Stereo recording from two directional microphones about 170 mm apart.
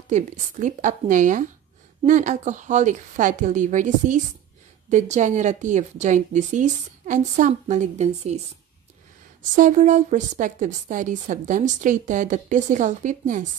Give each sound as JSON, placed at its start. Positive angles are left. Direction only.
{"t": 0.1, "sound": "a woman's voice", "side_deg": -45}
{"t": 9.4, "sound": "a woman's voice", "side_deg": -50}